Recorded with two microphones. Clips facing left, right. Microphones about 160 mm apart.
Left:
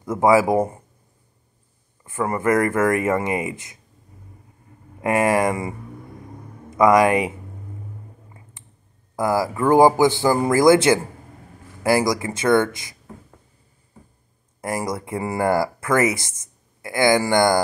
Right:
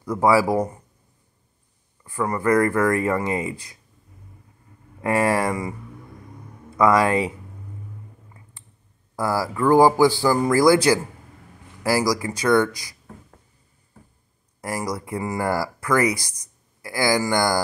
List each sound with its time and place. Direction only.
0.0 s speech: 20° left (ahead or behind)
2.0 s speech: 20° left (ahead or behind)
5.0 s speech: 20° left (ahead or behind)
9.1 s speech: 20° left (ahead or behind)
14.6 s speech: 25° left (ahead or behind)